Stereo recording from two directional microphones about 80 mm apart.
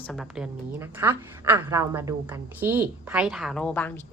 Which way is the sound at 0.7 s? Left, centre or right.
Right.